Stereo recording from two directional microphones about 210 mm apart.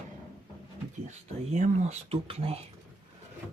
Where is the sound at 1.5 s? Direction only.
35° right (ahead or behind).